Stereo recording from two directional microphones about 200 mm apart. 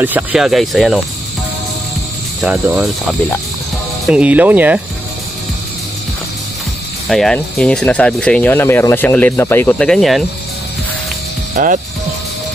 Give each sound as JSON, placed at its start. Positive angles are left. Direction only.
{"t": 0.0, "sound": "speech", "side_deg": -5}
{"t": 4.0, "sound": "speech", "side_deg": -5}
{"t": 7.1, "sound": "speech", "side_deg": 0}
{"t": 11.5, "sound": "speech", "side_deg": -40}